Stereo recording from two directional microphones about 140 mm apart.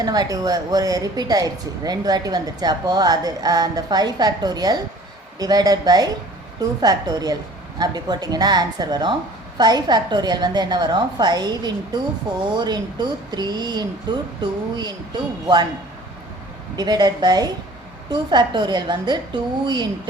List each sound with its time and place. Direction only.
0.0 s a woman's voice: 30° right (ahead or behind)
16.7 s a woman's voice: 30° right (ahead or behind)